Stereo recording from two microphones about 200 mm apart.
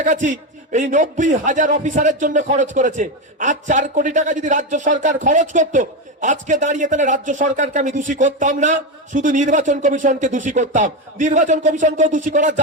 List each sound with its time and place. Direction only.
0.0 s a man's voice: 40° right (ahead or behind)